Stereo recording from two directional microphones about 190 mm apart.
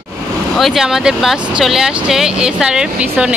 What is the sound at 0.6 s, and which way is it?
Speech, centre (ahead or behind).